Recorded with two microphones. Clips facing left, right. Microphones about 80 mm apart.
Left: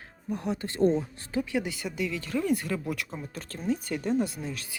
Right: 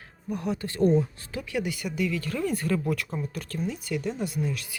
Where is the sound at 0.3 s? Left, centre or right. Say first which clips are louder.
Right 1 dB; left.